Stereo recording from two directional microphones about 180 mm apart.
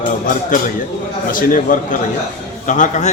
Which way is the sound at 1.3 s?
50° left (ahead or behind).